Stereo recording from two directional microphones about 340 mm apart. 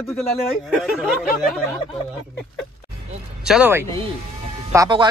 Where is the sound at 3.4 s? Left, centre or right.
Centre.